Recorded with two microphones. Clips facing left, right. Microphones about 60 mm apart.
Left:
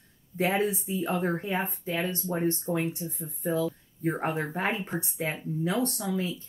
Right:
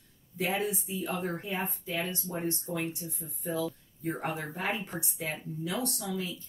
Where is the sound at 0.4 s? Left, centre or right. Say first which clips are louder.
Left 5 dB; left.